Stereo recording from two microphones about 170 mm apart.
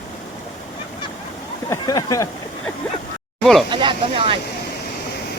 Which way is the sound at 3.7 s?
30° right (ahead or behind).